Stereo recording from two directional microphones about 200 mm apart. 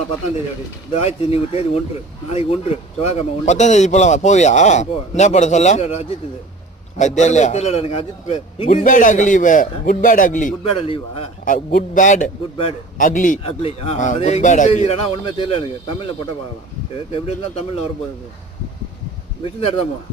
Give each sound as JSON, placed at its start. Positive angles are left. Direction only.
{"t": 0.9, "sound": "a man's voice", "side_deg": 30}
{"t": 8.8, "sound": "speech", "side_deg": 40}
{"t": 10.6, "sound": "a man's voice", "side_deg": 30}
{"t": 11.4, "sound": "a man's voice", "side_deg": 45}
{"t": 19.4, "sound": "a man's voice", "side_deg": 25}